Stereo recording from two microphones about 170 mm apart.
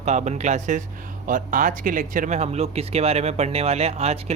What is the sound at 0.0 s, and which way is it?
Speech, 40° right (ahead or behind).